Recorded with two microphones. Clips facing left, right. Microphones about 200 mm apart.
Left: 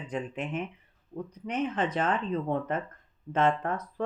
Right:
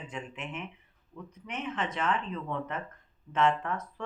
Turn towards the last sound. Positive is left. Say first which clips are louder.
# left 2 dB
turn(degrees=35)  # may be behind; listen again after turning